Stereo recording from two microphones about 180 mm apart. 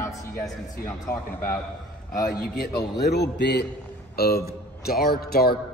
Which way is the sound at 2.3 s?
55° left (ahead or behind).